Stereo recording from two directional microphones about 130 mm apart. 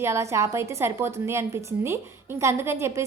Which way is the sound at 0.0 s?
20° right (ahead or behind).